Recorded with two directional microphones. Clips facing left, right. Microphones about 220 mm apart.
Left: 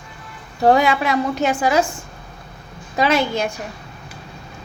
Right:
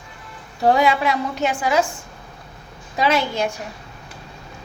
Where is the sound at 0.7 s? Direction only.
45° left (ahead or behind).